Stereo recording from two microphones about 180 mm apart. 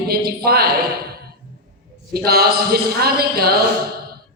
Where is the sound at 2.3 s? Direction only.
60° right (ahead or behind).